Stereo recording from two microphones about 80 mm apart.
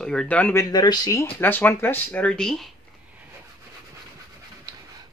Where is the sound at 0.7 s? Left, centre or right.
Left.